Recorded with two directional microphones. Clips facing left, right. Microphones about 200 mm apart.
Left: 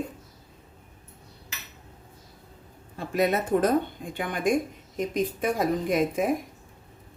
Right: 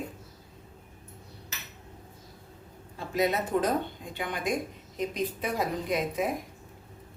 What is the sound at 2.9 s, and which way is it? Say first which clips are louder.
A man's voice: left 3 dB; 55° left (ahead or behind).